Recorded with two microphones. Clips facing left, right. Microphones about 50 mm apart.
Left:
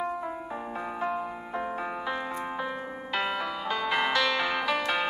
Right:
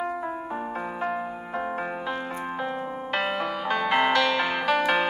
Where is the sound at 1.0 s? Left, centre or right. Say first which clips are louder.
Right 1 dB; right.